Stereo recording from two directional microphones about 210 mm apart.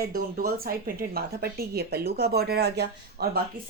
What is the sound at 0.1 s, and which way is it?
Speech, 45° right (ahead or behind).